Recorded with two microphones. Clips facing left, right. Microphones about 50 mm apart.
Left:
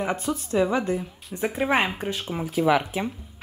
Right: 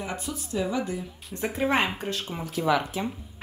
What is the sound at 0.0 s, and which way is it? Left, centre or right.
Speech, left.